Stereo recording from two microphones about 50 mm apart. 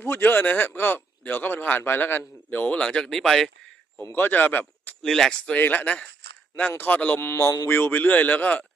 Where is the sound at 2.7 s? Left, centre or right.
Left.